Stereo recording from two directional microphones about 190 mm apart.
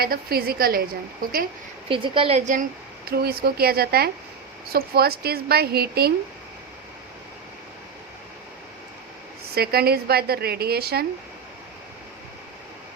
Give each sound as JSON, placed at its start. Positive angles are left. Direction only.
{"t": 0.0, "sound": "a woman's voice", "side_deg": -55}
{"t": 1.9, "sound": "a woman's voice", "side_deg": -25}
{"t": 3.1, "sound": "speech", "side_deg": -55}
{"t": 9.6, "sound": "speech", "side_deg": -55}